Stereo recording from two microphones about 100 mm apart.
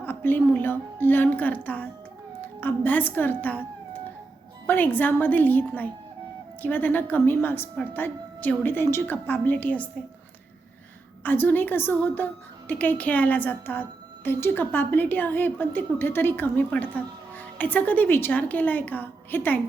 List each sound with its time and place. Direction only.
0.0 s a woman's voice: 20° left (ahead or behind)
4.6 s a woman's voice: 20° left (ahead or behind)
11.2 s a woman's voice: 20° left (ahead or behind)